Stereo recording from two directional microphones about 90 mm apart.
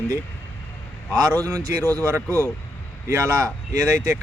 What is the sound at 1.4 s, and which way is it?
Speech, 40° right (ahead or behind).